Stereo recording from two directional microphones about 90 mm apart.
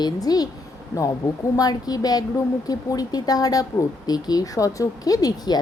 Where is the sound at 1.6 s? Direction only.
45° left (ahead or behind).